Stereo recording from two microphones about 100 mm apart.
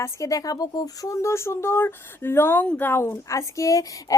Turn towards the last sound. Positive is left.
turn(degrees=35)  # may be behind; listen again after turning